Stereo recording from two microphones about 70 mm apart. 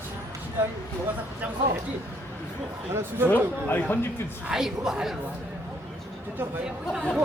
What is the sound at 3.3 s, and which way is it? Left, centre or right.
Speech, left.